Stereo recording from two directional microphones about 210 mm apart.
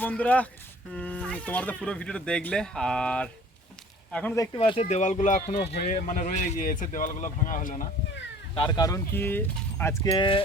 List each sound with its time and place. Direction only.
0.0 s speech: 5° left (ahead or behind)
4.5 s speech: 25° left (ahead or behind)
8.5 s speech: 20° left (ahead or behind)